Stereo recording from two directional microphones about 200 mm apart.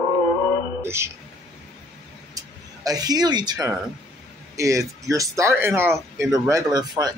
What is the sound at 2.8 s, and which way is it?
Speech, 20° right (ahead or behind).